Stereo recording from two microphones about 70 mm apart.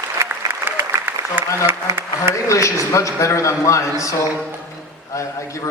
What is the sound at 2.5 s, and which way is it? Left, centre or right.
A man's voice, left.